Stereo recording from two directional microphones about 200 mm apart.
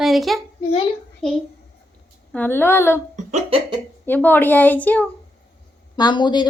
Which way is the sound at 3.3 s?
25° right (ahead or behind).